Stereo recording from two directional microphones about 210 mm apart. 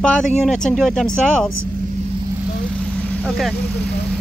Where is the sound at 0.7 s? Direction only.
Centre (ahead or behind).